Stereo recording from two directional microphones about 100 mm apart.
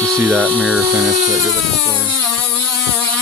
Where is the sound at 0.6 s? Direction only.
10° right (ahead or behind).